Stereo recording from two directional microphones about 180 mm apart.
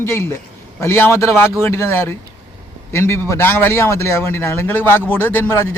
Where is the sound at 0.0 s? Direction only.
15° left (ahead or behind).